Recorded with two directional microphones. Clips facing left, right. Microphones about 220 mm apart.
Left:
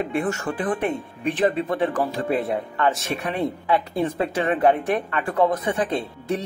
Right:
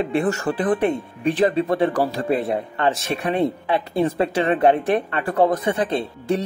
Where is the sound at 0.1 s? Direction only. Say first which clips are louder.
Right 4 dB; 35° right (ahead or behind).